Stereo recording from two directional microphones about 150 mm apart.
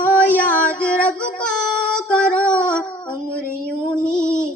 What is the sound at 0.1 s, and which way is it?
Female singing, 10° left (ahead or behind).